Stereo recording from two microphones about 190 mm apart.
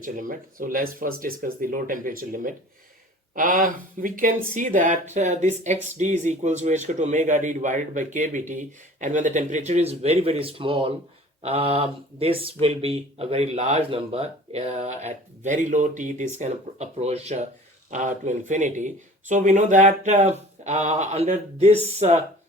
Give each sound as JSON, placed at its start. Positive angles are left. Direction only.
{"t": 0.0, "sound": "speech", "side_deg": -45}